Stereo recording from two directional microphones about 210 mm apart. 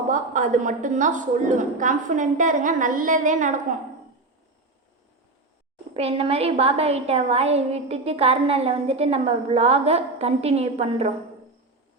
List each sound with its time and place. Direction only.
0.1 s a woman's voice: 35° right (ahead or behind)
5.9 s a woman's voice: 30° right (ahead or behind)